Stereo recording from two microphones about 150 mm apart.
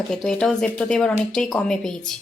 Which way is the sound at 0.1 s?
5° left (ahead or behind).